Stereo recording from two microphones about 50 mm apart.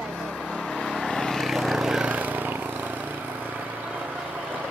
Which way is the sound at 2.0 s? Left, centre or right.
Right.